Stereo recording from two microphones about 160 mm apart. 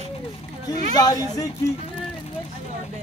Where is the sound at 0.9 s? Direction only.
25° left (ahead or behind).